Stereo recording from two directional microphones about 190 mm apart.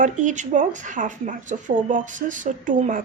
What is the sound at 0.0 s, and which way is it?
A woman's voice, 40° right (ahead or behind).